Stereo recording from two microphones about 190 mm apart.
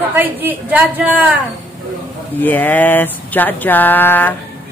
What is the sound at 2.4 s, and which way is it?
Speech, 10° left (ahead or behind).